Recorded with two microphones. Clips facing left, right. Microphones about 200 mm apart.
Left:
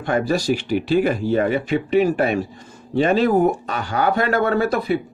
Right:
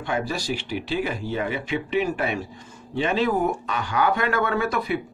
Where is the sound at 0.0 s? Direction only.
45° left (ahead or behind).